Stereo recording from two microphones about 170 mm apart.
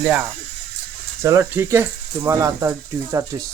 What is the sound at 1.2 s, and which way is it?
Speech, 15° right (ahead or behind).